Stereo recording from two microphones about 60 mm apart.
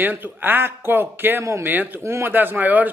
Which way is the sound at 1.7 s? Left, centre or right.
Right.